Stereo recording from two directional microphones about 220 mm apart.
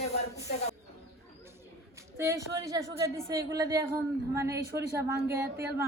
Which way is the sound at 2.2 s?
15° right (ahead or behind).